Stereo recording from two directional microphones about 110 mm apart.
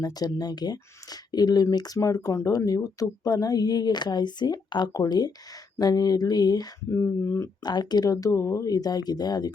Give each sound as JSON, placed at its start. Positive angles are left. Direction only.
{"t": 0.0, "sound": "speech", "side_deg": 35}
{"t": 7.6, "sound": "speech", "side_deg": 40}